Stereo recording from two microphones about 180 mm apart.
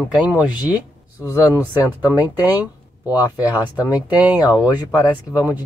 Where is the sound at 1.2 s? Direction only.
20° left (ahead or behind).